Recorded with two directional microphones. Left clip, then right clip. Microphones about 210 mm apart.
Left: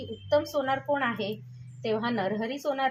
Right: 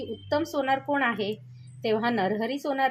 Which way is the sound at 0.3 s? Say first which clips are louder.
Even; 35° right (ahead or behind).